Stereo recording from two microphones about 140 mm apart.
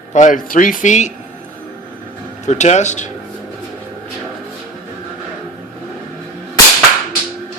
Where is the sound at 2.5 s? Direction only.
55° left (ahead or behind).